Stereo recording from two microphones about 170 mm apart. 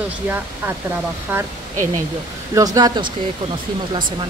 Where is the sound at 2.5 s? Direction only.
20° right (ahead or behind).